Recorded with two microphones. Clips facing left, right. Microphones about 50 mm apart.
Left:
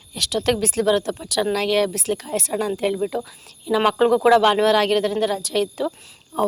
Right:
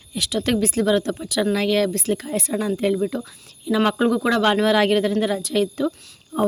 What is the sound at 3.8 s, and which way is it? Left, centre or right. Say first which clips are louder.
A woman's voice: left 3 dB; centre.